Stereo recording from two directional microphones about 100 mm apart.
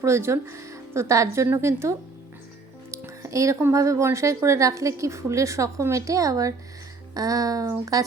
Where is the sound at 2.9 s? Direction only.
30° right (ahead or behind).